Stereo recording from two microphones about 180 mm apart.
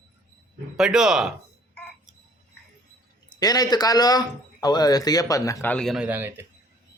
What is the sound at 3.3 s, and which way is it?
Speech, 20° left (ahead or behind).